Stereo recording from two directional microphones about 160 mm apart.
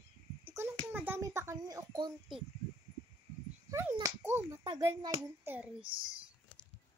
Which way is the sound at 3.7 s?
15° right (ahead or behind).